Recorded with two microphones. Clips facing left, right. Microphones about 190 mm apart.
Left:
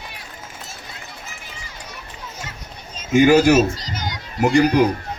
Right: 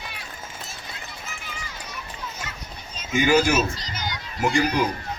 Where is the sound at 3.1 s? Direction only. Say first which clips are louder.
Left 7 dB; 45° left (ahead or behind).